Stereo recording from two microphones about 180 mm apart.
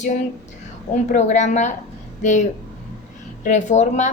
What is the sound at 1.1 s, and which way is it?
A woman's voice, 40° left (ahead or behind).